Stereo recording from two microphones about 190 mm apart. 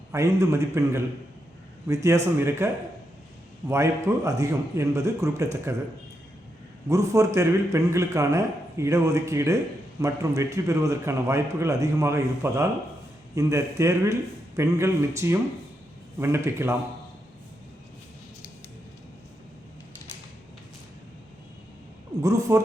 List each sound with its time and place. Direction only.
0.1 s a man's voice: 15° right (ahead or behind)
3.7 s a man's voice: 15° right (ahead or behind)
6.8 s a man's voice: 15° right (ahead or behind)
22.2 s a man's voice: 15° right (ahead or behind)